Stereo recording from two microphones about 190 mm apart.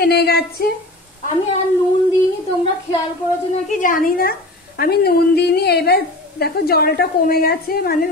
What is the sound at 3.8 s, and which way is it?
A woman's voice, 45° left (ahead or behind).